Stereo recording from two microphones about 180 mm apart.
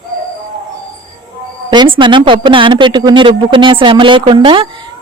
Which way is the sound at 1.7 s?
25° right (ahead or behind).